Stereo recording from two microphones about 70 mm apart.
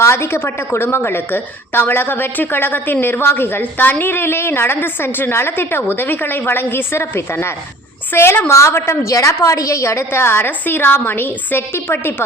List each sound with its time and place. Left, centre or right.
0.0 s a woman's voice: left